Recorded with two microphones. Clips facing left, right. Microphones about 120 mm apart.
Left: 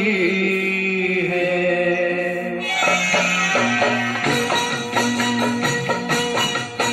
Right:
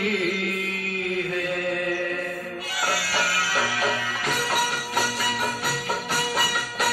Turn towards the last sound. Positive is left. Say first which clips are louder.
# left 4 dB
turn(degrees=55)  # may be behind; listen again after turning